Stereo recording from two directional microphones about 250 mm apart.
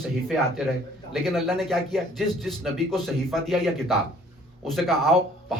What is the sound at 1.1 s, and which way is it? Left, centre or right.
Speech, centre.